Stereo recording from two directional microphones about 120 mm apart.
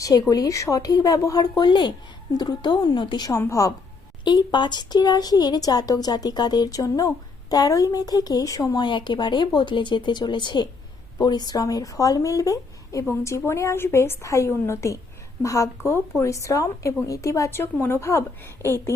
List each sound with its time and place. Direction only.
0.0 s speech: 30° left (ahead or behind)
4.2 s speech: 40° left (ahead or behind); by 18.5 s 20° left (ahead or behind)